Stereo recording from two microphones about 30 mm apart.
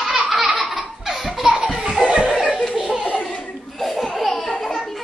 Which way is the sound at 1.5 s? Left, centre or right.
Centre.